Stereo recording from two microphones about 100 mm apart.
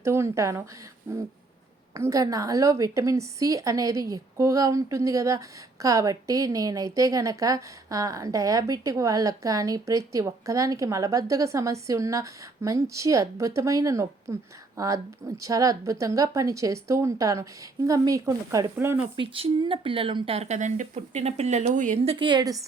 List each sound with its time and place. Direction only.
0.0 s speech: 25° right (ahead or behind)
19.1 s speech: 60° right (ahead or behind); by 20.5 s 80° right
20.9 s speech: 90° right
22.0 s a woman's voice: 75° right (ahead or behind)
22.3 s a woman's voice: 40° right (ahead or behind)